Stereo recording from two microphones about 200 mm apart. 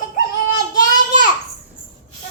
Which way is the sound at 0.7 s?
40° left (ahead or behind).